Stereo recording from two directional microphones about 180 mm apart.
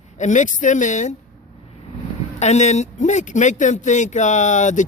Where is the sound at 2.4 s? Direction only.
40° left (ahead or behind).